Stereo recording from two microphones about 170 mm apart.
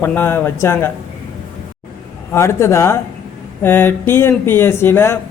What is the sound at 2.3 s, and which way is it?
A man's voice, 15° left (ahead or behind).